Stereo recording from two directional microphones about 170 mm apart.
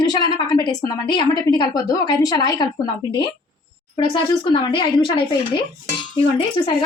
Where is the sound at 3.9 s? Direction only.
30° left (ahead or behind).